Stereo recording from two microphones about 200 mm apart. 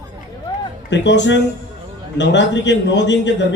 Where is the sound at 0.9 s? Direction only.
60° left (ahead or behind).